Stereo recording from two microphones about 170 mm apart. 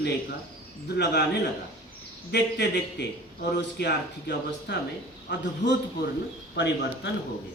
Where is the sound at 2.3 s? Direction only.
90° left.